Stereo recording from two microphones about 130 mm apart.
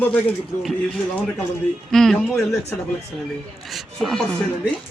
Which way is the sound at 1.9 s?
5° left (ahead or behind).